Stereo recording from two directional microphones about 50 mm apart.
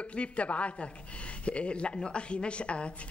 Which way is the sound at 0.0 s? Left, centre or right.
Left.